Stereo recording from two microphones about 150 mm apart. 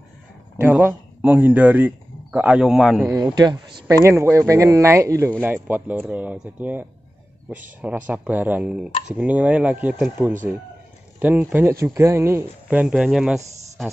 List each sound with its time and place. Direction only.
0.6 s a man's voice: 15° right (ahead or behind)
3.3 s speech: 25° right (ahead or behind)
8.1 s speech: 10° right (ahead or behind)
11.1 s speech: 10° right (ahead or behind)